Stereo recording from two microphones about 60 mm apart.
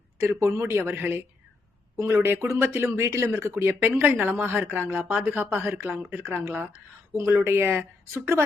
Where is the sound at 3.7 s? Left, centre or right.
Right.